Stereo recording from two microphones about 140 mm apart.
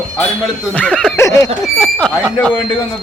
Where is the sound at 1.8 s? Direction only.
5° left (ahead or behind).